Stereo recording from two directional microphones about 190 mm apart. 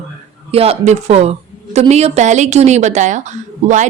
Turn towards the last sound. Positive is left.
turn(degrees=-40)  # may be behind; listen again after turning